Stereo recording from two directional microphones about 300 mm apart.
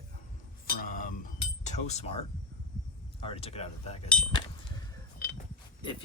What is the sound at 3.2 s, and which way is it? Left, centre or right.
Speech, centre.